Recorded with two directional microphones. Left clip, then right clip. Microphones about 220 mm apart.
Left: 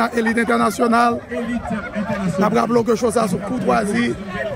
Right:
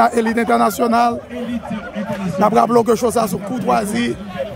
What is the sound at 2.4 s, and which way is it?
A man's voice, 10° right (ahead or behind).